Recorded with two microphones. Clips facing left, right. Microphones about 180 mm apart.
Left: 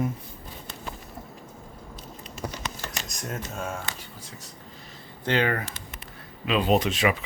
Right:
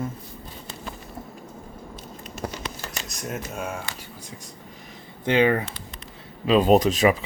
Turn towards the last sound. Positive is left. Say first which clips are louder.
# right 5 dB
turn(degrees=-40)  # may be behind; listen again after turning